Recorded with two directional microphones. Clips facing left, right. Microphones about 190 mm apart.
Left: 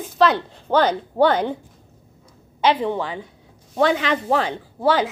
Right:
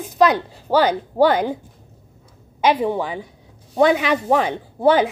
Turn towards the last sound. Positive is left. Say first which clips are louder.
# right 4 dB
turn(degrees=-20)  # may be behind; listen again after turning